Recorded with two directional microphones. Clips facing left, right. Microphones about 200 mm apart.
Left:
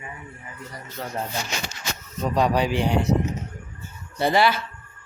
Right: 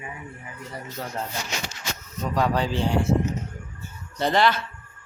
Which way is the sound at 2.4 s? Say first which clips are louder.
Left 2 dB; 15° left (ahead or behind).